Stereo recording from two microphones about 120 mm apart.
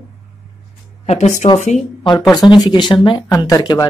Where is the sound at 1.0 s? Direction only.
75° left (ahead or behind).